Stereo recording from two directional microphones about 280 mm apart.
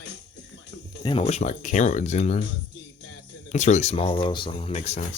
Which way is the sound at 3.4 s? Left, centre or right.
Left.